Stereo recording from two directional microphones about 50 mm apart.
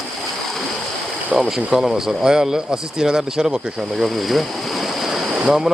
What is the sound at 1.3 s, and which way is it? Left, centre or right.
Speech, centre.